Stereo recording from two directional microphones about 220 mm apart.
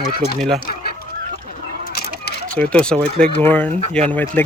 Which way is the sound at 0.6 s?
45° left (ahead or behind).